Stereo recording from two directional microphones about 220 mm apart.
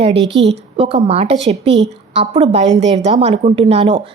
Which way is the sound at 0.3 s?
55° right (ahead or behind).